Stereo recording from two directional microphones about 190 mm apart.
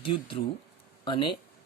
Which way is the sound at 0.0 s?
25° left (ahead or behind).